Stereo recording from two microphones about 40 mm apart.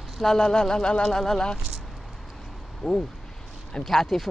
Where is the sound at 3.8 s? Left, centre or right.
Centre.